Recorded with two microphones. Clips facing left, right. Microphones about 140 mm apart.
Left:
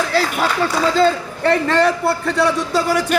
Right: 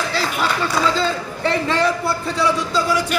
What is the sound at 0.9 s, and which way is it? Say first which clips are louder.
A man's voice: left 6 dB; 55° left (ahead or behind).